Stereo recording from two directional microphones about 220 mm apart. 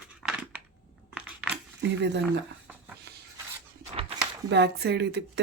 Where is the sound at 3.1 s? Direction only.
50° right (ahead or behind).